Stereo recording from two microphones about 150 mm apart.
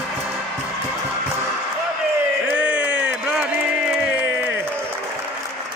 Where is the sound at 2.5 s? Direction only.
10° right (ahead or behind).